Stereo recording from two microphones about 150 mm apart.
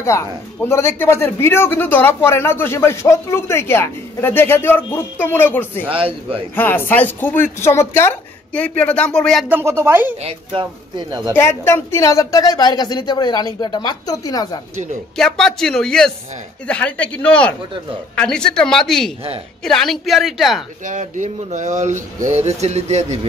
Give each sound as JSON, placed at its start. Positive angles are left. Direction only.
{"t": 0.0, "sound": "speech", "side_deg": 20}
{"t": 5.9, "sound": "speech", "side_deg": -35}
{"t": 6.5, "sound": "speech", "side_deg": 15}
{"t": 9.5, "sound": "speech", "side_deg": -15}
{"t": 10.2, "sound": "speech", "side_deg": -35}
{"t": 11.3, "sound": "speech", "side_deg": 15}
{"t": 15.1, "sound": "speech", "side_deg": 5}
{"t": 20.8, "sound": "speech", "side_deg": -55}